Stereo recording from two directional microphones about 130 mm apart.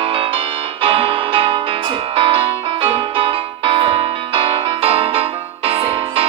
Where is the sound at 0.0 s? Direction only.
45° right (ahead or behind).